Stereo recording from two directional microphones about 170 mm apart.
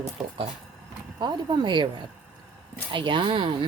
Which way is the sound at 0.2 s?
Centre (ahead or behind).